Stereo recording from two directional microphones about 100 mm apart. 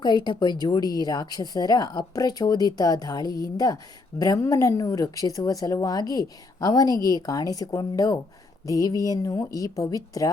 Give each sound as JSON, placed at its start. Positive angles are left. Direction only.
{"t": 0.0, "sound": "speech", "side_deg": 50}